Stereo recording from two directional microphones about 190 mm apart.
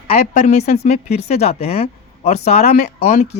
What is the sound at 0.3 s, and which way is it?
Speech, 35° left (ahead or behind).